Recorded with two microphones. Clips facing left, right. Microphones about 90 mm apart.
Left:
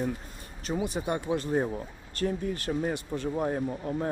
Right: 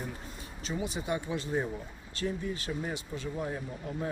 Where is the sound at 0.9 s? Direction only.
50° left (ahead or behind).